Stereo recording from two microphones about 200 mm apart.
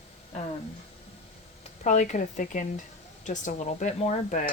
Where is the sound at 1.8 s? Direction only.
35° left (ahead or behind).